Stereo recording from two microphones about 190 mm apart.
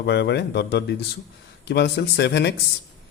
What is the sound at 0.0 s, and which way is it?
Speech, 60° left (ahead or behind).